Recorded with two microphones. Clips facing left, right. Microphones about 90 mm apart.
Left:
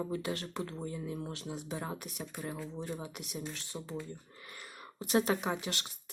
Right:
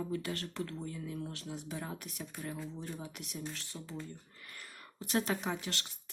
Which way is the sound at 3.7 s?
25° left (ahead or behind).